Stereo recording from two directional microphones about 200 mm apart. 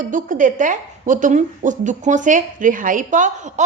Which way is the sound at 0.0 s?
40° right (ahead or behind).